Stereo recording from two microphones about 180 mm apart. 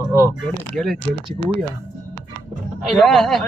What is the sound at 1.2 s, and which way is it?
Speech, 25° right (ahead or behind).